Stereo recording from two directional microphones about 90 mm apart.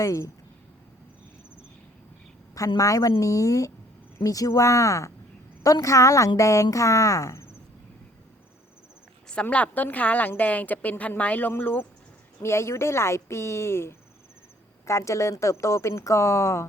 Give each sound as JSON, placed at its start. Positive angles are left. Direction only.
{"t": 0.0, "sound": "speech", "side_deg": 35}
{"t": 2.7, "sound": "speech", "side_deg": 40}
{"t": 9.3, "sound": "a woman's voice", "side_deg": 15}